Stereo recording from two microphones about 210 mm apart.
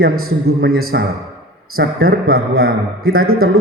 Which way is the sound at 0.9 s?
55° right (ahead or behind).